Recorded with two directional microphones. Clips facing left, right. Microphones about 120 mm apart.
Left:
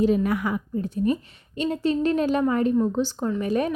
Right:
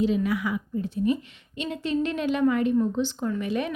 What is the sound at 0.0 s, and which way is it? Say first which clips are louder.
A woman's voice: left 3 dB; 50° left (ahead or behind).